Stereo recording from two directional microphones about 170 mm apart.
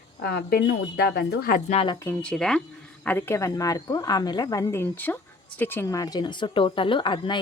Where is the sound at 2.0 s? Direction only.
15° left (ahead or behind).